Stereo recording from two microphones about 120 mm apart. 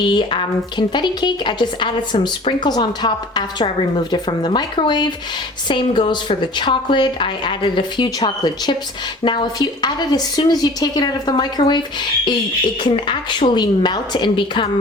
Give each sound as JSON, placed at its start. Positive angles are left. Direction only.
{"t": 0.0, "sound": "speech", "side_deg": 40}
{"t": 12.8, "sound": "speech", "side_deg": 40}